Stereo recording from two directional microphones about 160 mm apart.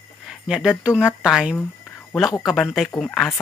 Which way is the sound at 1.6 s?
Centre (ahead or behind).